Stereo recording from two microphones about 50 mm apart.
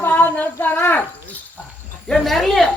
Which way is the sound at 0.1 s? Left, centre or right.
Left.